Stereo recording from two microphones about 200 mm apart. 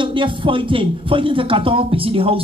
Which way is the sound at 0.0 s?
25° right (ahead or behind).